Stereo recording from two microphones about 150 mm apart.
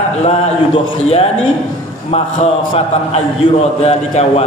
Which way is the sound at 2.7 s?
35° left (ahead or behind).